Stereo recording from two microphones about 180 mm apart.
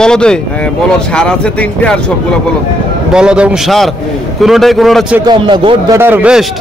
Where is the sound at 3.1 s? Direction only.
5° right (ahead or behind).